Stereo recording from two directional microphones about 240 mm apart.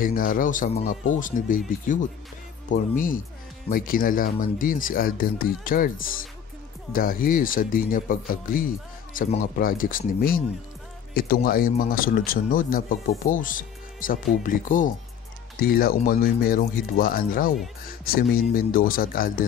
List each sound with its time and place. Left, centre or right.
0.0 s speech: left
2.7 s speech: left